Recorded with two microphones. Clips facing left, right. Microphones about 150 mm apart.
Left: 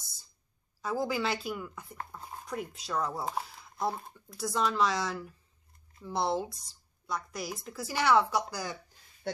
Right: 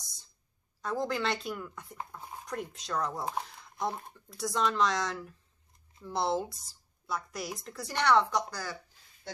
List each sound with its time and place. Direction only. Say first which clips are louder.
0.8 s speech: left 1 dB; 5° left (ahead or behind)